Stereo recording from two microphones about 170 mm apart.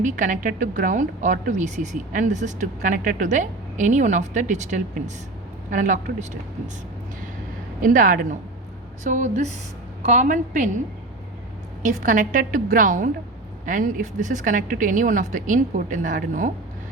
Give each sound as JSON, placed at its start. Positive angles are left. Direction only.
{"t": 0.0, "sound": "a woman's voice", "side_deg": -50}
{"t": 7.8, "sound": "a woman's voice", "side_deg": -50}
{"t": 11.9, "sound": "a woman's voice", "side_deg": -50}